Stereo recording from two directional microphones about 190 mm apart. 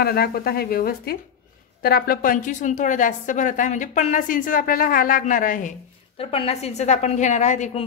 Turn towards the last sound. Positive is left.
turn(degrees=40)  # may be behind; listen again after turning